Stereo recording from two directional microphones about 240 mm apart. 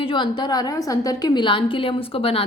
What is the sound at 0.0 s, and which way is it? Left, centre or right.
A woman's voice, left.